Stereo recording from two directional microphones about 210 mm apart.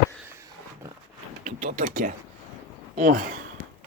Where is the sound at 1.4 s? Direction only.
35° right (ahead or behind).